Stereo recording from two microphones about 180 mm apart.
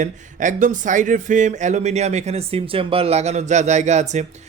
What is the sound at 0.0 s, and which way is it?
Speech, 45° right (ahead or behind).